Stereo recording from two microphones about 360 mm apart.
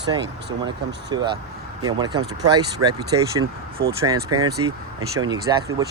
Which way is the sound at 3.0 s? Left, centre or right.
Right.